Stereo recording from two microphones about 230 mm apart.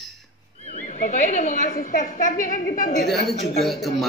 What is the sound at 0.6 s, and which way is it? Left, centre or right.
A woman's voice, left.